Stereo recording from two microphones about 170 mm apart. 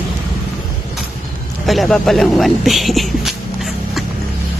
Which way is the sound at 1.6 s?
Centre (ahead or behind).